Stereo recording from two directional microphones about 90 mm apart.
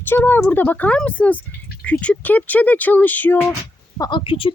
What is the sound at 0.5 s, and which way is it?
A woman's voice, 20° left (ahead or behind).